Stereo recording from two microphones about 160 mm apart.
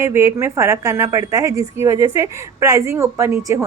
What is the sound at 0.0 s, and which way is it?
A woman's voice, 20° right (ahead or behind).